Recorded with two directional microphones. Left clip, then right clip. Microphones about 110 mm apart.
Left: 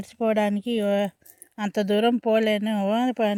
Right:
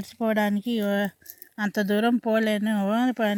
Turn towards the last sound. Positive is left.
turn(degrees=0)  # may be behind; listen again after turning